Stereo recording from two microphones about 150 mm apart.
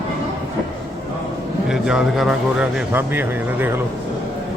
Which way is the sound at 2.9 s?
15° right (ahead or behind).